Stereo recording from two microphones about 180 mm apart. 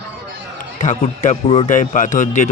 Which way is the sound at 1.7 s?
45° left (ahead or behind).